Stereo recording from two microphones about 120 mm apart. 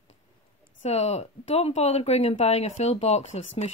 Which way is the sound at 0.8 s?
65° left (ahead or behind).